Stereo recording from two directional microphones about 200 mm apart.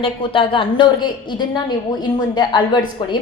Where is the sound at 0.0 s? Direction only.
25° left (ahead or behind).